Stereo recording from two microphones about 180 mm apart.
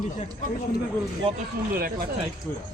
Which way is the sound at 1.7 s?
55° right (ahead or behind).